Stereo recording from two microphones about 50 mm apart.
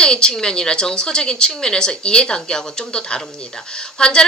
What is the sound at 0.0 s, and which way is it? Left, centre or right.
A woman's voice, centre.